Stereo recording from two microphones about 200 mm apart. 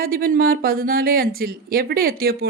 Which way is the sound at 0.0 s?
50° right (ahead or behind).